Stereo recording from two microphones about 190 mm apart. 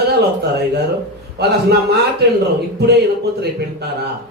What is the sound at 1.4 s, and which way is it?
Speech, 60° right (ahead or behind).